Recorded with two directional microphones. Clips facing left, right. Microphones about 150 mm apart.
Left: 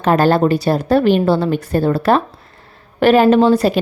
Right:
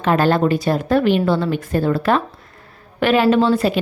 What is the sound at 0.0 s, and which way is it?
A woman's voice, 40° left (ahead or behind).